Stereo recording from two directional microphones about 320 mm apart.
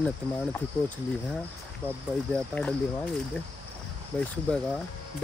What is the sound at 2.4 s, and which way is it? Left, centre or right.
Speech, centre.